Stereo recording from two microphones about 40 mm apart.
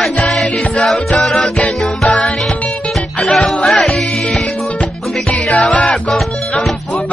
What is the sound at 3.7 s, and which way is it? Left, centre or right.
Music, centre.